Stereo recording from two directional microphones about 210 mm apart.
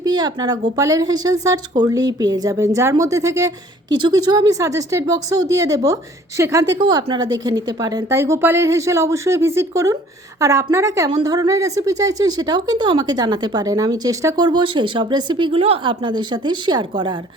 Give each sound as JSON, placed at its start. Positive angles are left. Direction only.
{"t": 0.0, "sound": "a woman's voice", "side_deg": -20}